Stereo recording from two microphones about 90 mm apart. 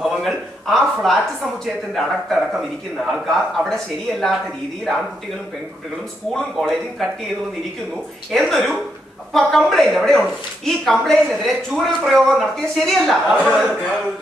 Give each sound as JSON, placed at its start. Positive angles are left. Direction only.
{"t": 0.0, "sound": "a woman's voice", "side_deg": 0}
{"t": 6.3, "sound": "a woman's voice", "side_deg": 0}
{"t": 8.3, "sound": "a woman's voice", "side_deg": 0}
{"t": 13.3, "sound": "a man's voice", "side_deg": -15}